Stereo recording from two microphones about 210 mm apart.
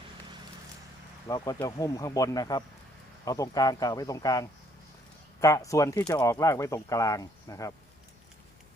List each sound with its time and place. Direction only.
1.3 s speech: 15° left (ahead or behind)